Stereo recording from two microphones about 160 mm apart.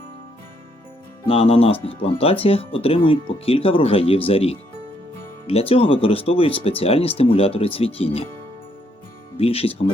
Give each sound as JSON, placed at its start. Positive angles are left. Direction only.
{"t": 1.3, "sound": "speech", "side_deg": 35}
{"t": 9.4, "sound": "speech", "side_deg": 35}